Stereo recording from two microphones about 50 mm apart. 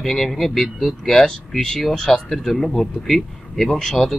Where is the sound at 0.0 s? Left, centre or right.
Centre.